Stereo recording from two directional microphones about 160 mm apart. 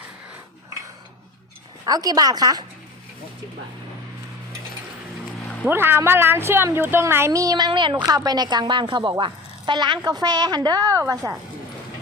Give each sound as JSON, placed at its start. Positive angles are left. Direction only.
{"t": 1.8, "sound": "a woman's voice", "side_deg": -25}
{"t": 5.6, "sound": "a woman's voice", "side_deg": -15}